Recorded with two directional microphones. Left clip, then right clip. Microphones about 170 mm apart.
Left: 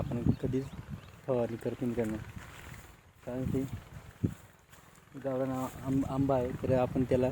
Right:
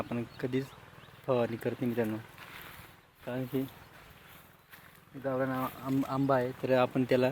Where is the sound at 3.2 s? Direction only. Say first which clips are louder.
Right 1 dB; 15° right (ahead or behind).